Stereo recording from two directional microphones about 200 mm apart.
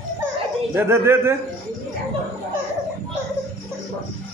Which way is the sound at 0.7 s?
10° right (ahead or behind).